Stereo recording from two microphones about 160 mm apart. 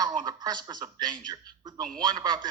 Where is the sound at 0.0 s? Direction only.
30° right (ahead or behind).